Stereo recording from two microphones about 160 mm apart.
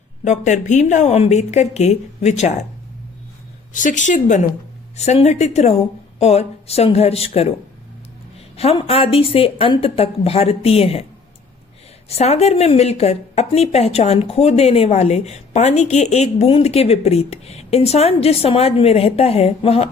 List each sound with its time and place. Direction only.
0.3 s a woman's voice: 50° left (ahead or behind)
3.7 s a woman's voice: 55° left (ahead or behind)
8.5 s a woman's voice: 40° left (ahead or behind)
12.0 s a woman's voice: 40° left (ahead or behind)